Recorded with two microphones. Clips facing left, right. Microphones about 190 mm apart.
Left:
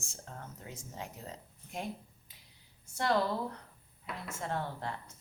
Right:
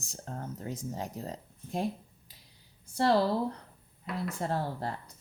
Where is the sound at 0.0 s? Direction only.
35° right (ahead or behind).